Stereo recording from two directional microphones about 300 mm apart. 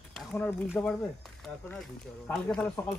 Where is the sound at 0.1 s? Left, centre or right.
Centre.